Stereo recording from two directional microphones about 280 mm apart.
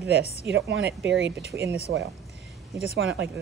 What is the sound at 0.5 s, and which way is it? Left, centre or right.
Speech, right.